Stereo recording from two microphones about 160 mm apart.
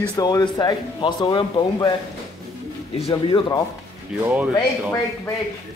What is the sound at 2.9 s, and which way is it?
Speech, 35° left (ahead or behind).